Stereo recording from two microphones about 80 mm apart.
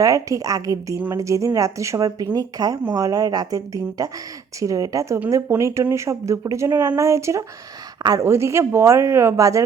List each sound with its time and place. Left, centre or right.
0.0 s speech: right